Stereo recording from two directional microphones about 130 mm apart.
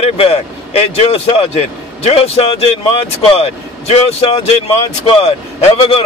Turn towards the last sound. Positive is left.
turn(degrees=50)  # may be behind; listen again after turning